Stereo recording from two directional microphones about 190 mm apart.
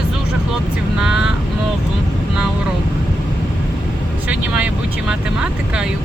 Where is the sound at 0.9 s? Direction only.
5° right (ahead or behind).